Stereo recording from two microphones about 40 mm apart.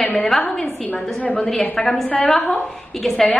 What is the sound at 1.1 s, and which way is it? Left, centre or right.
Speech, left.